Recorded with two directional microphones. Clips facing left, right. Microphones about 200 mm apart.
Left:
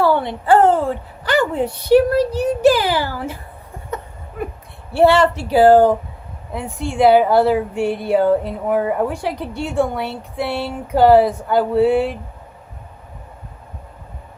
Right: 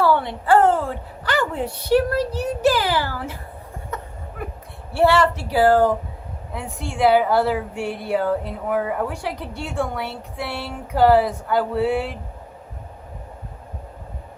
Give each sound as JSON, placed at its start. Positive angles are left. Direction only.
{"t": 0.0, "sound": "a woman's voice", "side_deg": 20}
{"t": 3.9, "sound": "a sound", "side_deg": 20}
{"t": 4.9, "sound": "speech", "side_deg": 20}